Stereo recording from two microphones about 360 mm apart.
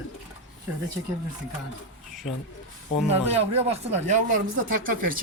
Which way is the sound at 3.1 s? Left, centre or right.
Centre.